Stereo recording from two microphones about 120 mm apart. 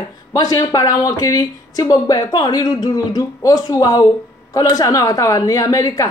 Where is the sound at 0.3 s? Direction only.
30° left (ahead or behind).